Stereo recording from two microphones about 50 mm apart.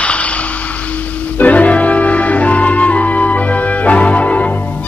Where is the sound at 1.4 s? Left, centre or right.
Left.